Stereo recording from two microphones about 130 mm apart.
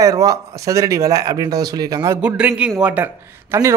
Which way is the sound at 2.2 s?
10° right (ahead or behind).